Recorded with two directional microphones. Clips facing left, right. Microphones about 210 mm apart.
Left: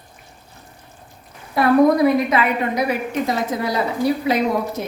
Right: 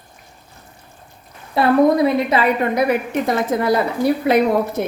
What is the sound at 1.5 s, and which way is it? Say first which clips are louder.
Speech: even; 25° right (ahead or behind).